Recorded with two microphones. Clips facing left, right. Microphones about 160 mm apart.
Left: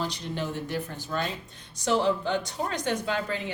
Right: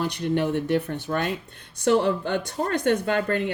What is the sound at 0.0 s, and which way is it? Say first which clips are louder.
A woman's voice: right 8 dB; 60° right (ahead or behind).